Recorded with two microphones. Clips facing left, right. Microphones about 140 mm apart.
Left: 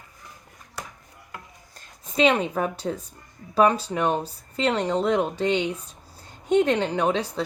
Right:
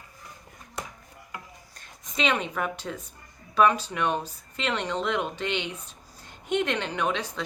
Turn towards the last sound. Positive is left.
turn(degrees=35)  # may be behind; listen again after turning